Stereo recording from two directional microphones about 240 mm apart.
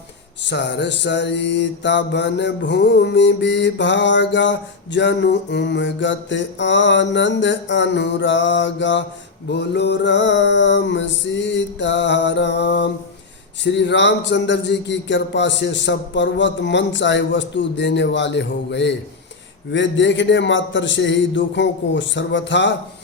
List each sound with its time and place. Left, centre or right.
0.4 s mantra: left